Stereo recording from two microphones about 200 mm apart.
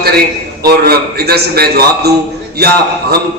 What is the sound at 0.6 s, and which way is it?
A man's voice, 50° right (ahead or behind).